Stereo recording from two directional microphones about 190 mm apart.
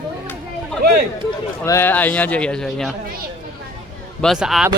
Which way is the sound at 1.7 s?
10° left (ahead or behind).